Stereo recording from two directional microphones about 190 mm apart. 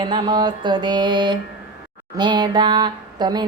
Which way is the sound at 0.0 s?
25° right (ahead or behind).